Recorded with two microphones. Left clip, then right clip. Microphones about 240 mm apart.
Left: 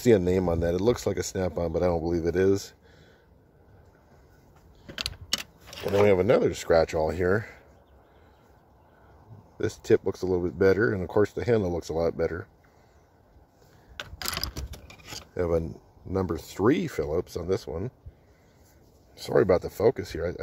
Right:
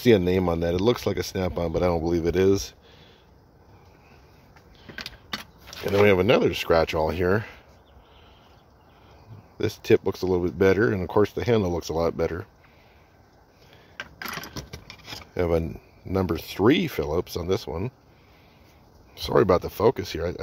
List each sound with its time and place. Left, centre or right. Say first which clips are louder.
0.0 s speech: right 2 dB; centre
5.8 s speech: right 2 dB; centre
9.6 s speech: right 2 dB; centre
14.2 s a sound: left 2 dB; left
15.1 s speech: right 2 dB; centre
19.2 s speech: right 2 dB; centre